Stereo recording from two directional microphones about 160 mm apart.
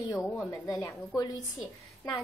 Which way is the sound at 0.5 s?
20° left (ahead or behind).